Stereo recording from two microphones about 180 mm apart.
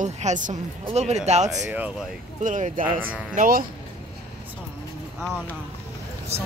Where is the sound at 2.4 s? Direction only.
45° right (ahead or behind).